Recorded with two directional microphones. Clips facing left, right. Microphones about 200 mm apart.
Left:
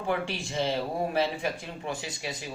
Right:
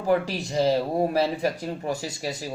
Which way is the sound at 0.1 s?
35° right (ahead or behind).